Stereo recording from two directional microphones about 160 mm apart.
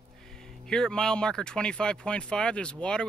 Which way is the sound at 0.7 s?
5° left (ahead or behind).